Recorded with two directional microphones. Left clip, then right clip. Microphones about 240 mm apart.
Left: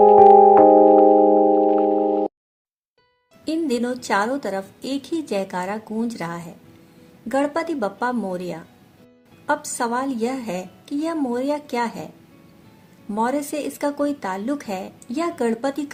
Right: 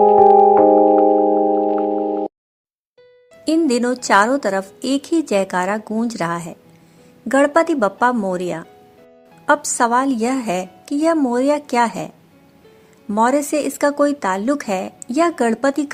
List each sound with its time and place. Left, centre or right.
0.0 s music: centre
3.4 s a woman's voice: right
13.1 s a woman's voice: right